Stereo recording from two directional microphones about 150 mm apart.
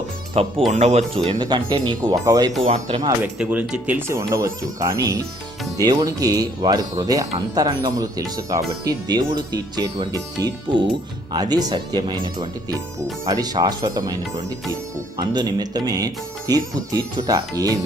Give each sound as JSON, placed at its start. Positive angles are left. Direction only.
{"t": 0.4, "sound": "speech", "side_deg": -45}
{"t": 1.3, "sound": "speech", "side_deg": -30}
{"t": 2.6, "sound": "speech", "side_deg": -40}
{"t": 3.3, "sound": "speech", "side_deg": -10}
{"t": 15.2, "sound": "speech", "side_deg": -30}